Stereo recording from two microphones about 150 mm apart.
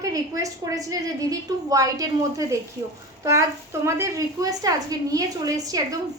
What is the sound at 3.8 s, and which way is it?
Speech, 20° right (ahead or behind).